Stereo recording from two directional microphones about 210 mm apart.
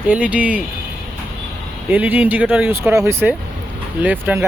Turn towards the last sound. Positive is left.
turn(degrees=-10)  # may be behind; listen again after turning